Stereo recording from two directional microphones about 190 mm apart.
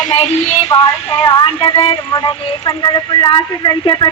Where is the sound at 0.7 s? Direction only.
20° left (ahead or behind).